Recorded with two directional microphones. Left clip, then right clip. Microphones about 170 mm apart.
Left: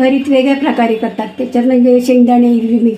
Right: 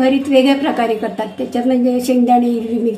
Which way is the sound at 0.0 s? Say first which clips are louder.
Left 2 dB; 35° left (ahead or behind).